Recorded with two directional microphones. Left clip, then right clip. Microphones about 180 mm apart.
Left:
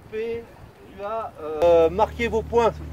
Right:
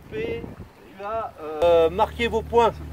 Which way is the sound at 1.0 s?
35° left (ahead or behind).